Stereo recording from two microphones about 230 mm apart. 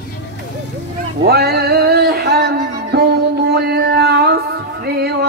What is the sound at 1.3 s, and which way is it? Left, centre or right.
Music, right.